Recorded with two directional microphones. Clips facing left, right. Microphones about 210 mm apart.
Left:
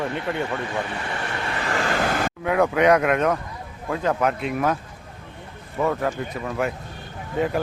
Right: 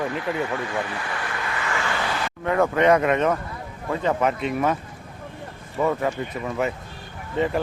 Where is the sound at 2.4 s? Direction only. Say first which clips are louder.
Even; 5° left (ahead or behind).